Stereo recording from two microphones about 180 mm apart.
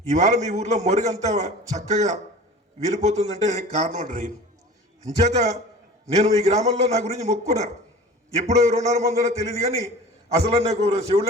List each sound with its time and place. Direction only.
0.1 s a man's voice: 40° right (ahead or behind)
5.3 s a man's voice: 40° right (ahead or behind)